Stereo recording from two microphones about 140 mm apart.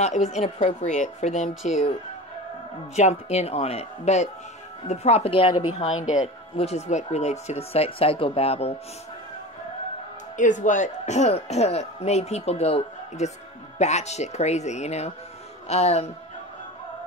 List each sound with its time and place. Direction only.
0.0 s a woman's voice: 55° left (ahead or behind)
1.5 s speech: centre (ahead or behind)
3.0 s speech: 50° left (ahead or behind)
5.9 s a woman's voice: 60° left (ahead or behind)
6.5 s speech: 50° left (ahead or behind)
10.3 s speech: 65° left (ahead or behind); by 16.1 s 50° left (ahead or behind)